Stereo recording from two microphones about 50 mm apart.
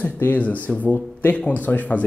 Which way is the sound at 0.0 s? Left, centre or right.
Left.